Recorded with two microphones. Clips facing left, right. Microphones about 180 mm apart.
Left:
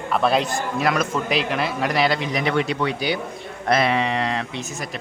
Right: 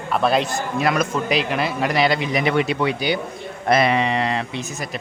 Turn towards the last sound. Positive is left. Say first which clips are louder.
# right 2 dB
turn(degrees=0)  # may be behind; listen again after turning